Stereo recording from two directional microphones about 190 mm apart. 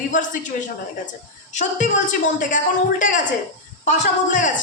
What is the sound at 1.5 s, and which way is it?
A man's voice, 40° left (ahead or behind).